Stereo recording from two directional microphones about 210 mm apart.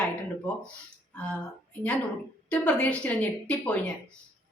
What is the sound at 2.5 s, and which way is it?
A woman's voice, 5° left (ahead or behind).